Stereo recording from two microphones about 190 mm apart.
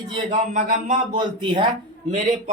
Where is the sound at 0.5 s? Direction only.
45° right (ahead or behind).